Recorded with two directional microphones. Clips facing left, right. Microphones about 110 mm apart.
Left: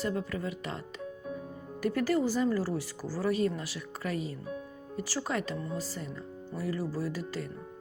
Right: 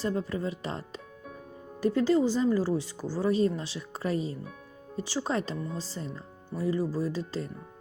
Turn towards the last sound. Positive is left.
turn(degrees=-25)  # may be behind; listen again after turning